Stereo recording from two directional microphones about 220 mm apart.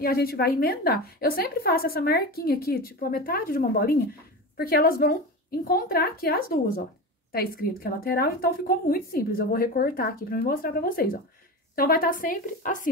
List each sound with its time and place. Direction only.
0.0 s a woman's voice: 45° left (ahead or behind)